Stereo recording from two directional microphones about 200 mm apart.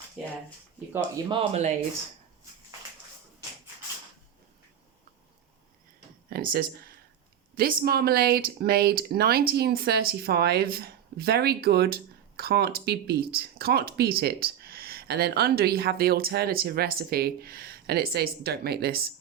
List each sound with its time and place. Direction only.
1.1 s speech: 25° right (ahead or behind)
6.3 s speech: 45° right (ahead or behind)